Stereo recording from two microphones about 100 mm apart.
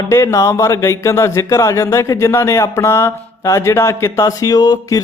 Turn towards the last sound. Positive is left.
turn(degrees=35)  # may be behind; listen again after turning